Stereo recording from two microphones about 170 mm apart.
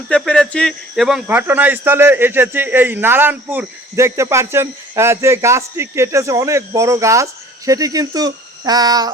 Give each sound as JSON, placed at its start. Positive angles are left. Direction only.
{"t": 0.1, "sound": "speech", "side_deg": 5}